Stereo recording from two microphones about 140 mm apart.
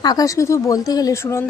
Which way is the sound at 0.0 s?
30° left (ahead or behind).